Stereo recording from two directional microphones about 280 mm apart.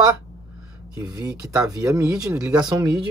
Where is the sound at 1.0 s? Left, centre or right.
Centre.